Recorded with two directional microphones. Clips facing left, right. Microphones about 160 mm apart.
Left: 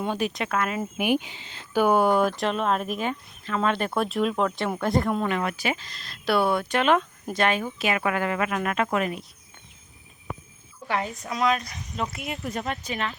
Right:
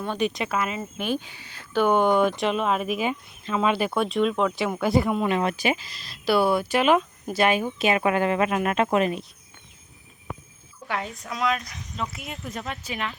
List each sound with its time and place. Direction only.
0.2 s speech: centre (ahead or behind)
0.8 s speech: 15° left (ahead or behind)
1.7 s speech: 5° left (ahead or behind)
5.3 s speech: 25° right (ahead or behind)
10.8 s speech: centre (ahead or behind)